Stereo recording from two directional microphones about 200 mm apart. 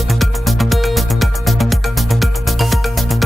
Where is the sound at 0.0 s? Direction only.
Centre (ahead or behind).